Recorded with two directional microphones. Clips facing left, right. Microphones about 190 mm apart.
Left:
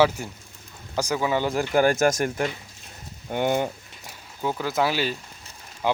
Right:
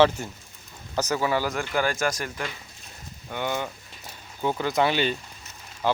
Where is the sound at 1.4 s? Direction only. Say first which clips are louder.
Left 6 dB; 40° left (ahead or behind).